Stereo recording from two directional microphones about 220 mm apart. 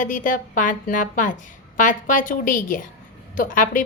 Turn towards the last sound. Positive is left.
turn(degrees=35)  # may be behind; listen again after turning